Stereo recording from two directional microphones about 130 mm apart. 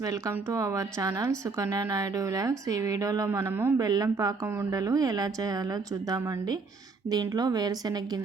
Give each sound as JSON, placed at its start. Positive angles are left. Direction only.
{"t": 0.0, "sound": "a woman's voice", "side_deg": -25}
{"t": 3.8, "sound": "a woman's voice", "side_deg": -30}